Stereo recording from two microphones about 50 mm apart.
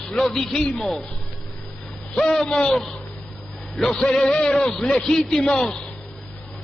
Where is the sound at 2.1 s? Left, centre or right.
Centre.